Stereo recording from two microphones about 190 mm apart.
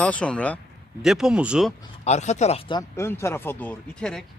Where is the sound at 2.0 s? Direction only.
35° left (ahead or behind).